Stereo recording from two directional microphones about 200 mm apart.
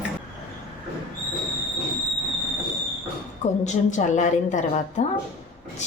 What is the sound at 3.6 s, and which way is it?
A woman's voice, 35° left (ahead or behind).